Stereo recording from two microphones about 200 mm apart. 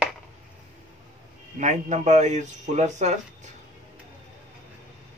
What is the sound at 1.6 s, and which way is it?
Speech, 35° right (ahead or behind).